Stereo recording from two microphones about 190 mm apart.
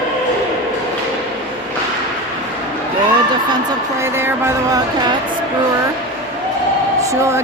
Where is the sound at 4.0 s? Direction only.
15° right (ahead or behind).